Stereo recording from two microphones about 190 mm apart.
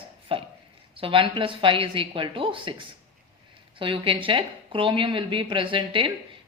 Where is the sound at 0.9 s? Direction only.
30° right (ahead or behind).